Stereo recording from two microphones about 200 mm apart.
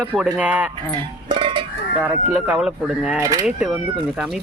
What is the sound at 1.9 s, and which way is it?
Speech, 10° right (ahead or behind).